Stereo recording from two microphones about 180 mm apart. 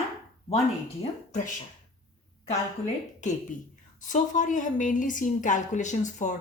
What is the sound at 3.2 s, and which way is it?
A woman's voice, 45° left (ahead or behind).